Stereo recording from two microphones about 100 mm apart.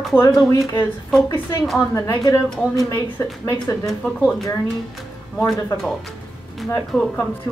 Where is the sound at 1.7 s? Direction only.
25° left (ahead or behind).